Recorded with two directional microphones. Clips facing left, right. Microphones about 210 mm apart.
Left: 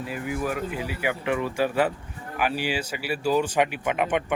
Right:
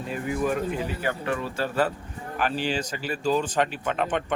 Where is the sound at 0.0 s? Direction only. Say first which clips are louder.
Right 2 dB; 5° left (ahead or behind).